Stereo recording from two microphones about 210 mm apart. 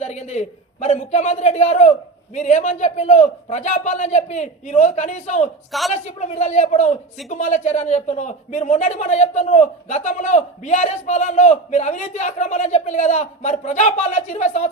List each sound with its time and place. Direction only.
0.0 s a man's voice: 35° left (ahead or behind)